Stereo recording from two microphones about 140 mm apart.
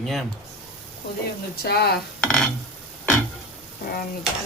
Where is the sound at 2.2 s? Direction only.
5° left (ahead or behind).